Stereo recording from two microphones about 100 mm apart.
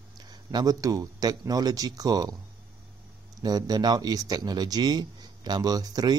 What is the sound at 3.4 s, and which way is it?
Speech, 40° right (ahead or behind).